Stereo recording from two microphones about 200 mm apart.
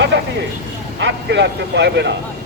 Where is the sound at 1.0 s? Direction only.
60° right (ahead or behind).